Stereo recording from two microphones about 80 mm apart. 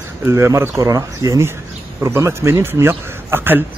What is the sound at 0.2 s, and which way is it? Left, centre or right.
A man's voice, right.